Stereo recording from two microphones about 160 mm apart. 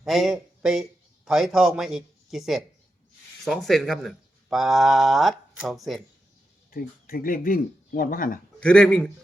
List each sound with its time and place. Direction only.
0.0 s a man's voice: centre (ahead or behind)
6.7 s speech: 65° left (ahead or behind)
8.6 s speech: 5° left (ahead or behind)